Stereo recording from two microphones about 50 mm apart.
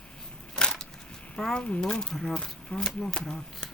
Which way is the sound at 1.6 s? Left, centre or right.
Left.